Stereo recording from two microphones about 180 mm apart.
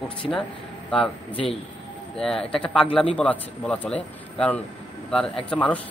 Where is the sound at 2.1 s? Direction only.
5° left (ahead or behind).